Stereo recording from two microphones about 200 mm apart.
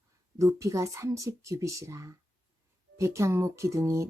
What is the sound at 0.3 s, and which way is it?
Speech, 15° right (ahead or behind).